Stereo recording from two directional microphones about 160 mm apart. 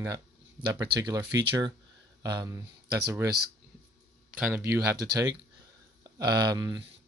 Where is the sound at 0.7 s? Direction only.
25° right (ahead or behind).